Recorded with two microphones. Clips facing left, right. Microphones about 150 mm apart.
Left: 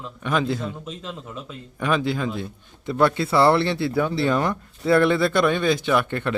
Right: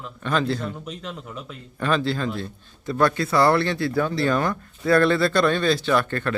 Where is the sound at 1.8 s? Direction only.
15° left (ahead or behind).